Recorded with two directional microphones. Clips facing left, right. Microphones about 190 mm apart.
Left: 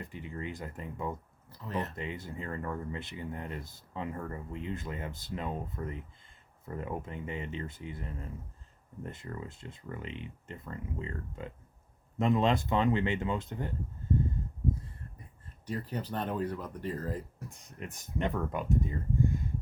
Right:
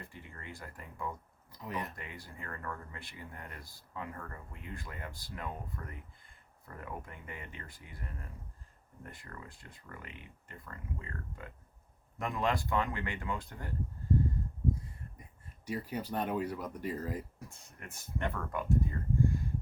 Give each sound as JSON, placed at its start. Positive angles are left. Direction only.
{"t": 0.0, "sound": "speech", "side_deg": 20}
{"t": 1.5, "sound": "speech", "side_deg": -15}
{"t": 2.0, "sound": "speech", "side_deg": 25}
{"t": 15.6, "sound": "speech", "side_deg": -10}
{"t": 17.5, "sound": "speech", "side_deg": 20}